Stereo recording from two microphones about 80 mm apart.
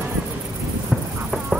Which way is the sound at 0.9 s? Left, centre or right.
Centre.